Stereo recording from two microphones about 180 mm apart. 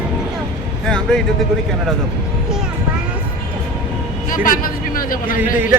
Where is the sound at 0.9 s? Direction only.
5° left (ahead or behind).